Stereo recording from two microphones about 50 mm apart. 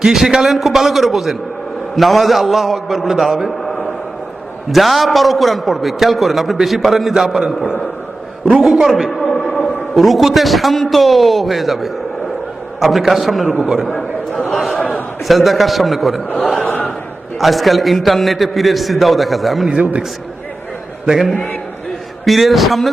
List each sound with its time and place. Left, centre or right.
0.0 s a man's voice: centre
8.6 s a man's voice: centre
9.2 s a sound: left
9.9 s a man's voice: centre
14.5 s a sound: centre
15.3 s a man's voice: centre
19.7 s a man's voice: right
21.3 s a man's voice: left
22.2 s a man's voice: centre